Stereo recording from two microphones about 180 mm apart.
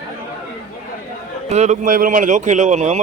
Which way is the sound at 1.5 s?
40° right (ahead or behind).